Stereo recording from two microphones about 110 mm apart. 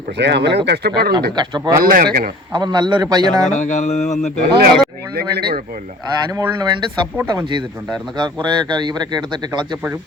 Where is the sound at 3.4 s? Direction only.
90° left.